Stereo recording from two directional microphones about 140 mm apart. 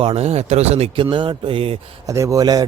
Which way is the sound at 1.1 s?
35° right (ahead or behind).